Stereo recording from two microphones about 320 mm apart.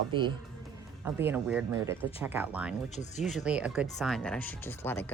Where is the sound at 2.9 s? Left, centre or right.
Left.